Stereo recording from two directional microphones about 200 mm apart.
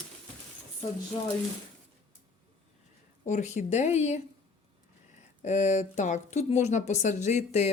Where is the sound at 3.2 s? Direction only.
35° left (ahead or behind).